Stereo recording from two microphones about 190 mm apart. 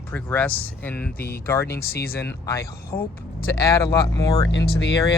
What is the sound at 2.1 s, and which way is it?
Speech, 15° left (ahead or behind).